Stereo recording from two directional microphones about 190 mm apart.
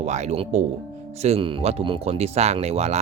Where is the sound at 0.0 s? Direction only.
35° right (ahead or behind).